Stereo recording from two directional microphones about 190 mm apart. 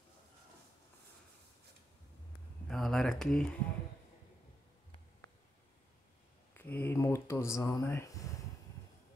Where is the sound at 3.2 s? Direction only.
5° left (ahead or behind).